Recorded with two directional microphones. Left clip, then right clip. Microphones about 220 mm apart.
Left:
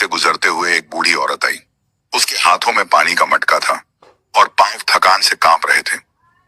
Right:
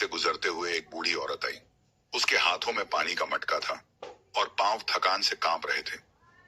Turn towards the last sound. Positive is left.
turn(degrees=50)  # may be behind; listen again after turning